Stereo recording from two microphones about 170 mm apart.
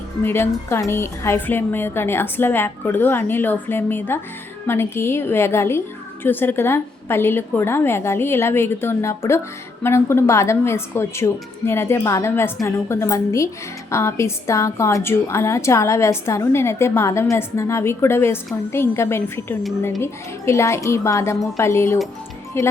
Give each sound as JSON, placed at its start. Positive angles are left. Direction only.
{"t": 0.2, "sound": "a woman's voice", "side_deg": 15}